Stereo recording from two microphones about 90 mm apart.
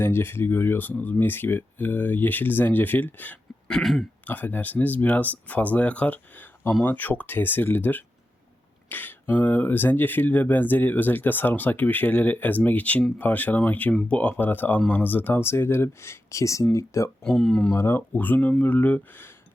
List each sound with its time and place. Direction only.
0.0 s speech: 25° left (ahead or behind)
3.7 s throat clearing: 5° left (ahead or behind)
4.3 s speech: 20° left (ahead or behind)
17.2 s speech: 5° left (ahead or behind)
17.7 s speech: 30° left (ahead or behind)
18.1 s speech: 20° left (ahead or behind)